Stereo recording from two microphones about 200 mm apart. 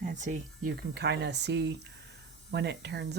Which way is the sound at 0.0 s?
40° right (ahead or behind).